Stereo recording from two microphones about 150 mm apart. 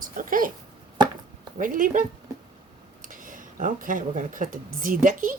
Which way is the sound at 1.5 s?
65° right (ahead or behind).